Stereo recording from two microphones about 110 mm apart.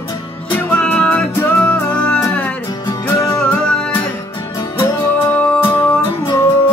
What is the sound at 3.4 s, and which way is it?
Music, 10° left (ahead or behind).